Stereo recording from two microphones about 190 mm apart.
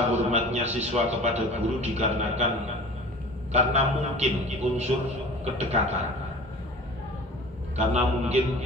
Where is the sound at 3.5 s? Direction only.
35° right (ahead or behind).